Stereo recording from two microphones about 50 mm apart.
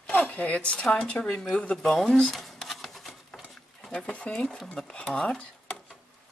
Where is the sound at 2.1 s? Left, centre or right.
Centre.